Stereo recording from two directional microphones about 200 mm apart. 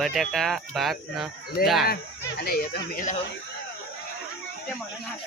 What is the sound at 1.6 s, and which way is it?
Speech, 45° left (ahead or behind).